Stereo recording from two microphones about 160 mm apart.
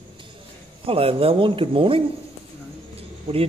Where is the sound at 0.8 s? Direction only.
35° right (ahead or behind).